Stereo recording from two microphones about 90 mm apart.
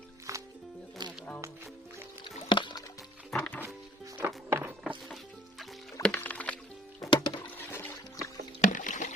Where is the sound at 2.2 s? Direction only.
60° left (ahead or behind).